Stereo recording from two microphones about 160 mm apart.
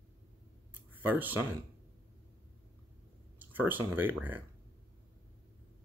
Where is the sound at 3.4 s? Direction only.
10° right (ahead or behind).